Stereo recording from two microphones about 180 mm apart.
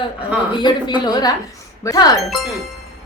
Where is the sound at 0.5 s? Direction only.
25° left (ahead or behind).